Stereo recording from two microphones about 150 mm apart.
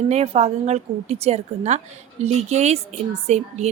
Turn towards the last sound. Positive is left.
turn(degrees=-45)  # may be behind; listen again after turning